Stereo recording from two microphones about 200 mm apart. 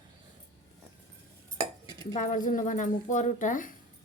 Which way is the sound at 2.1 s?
40° left (ahead or behind).